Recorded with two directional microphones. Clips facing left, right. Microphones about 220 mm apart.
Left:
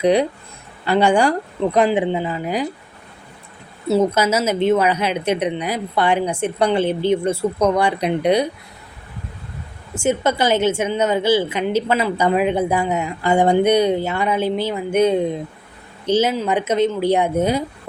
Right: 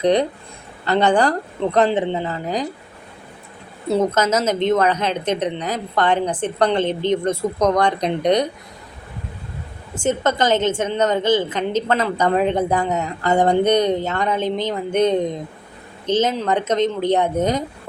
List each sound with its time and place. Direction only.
0.0 s a woman's voice: 10° left (ahead or behind)
3.8 s a woman's voice: 10° left (ahead or behind)
9.9 s a woman's voice: 10° left (ahead or behind)